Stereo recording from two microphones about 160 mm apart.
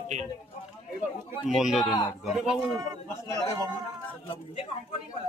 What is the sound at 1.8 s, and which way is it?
Speech, 25° left (ahead or behind).